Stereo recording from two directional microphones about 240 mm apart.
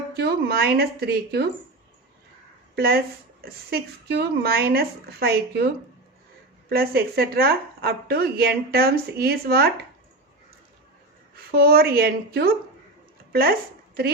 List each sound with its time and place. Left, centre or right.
0.2 s speech: right
2.7 s a woman's voice: right
6.7 s speech: right
11.5 s speech: right